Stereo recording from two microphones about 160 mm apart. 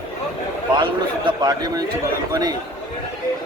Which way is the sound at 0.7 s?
30° right (ahead or behind).